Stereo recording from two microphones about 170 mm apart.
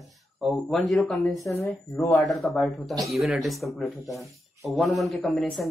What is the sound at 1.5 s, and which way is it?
Speech, 15° left (ahead or behind).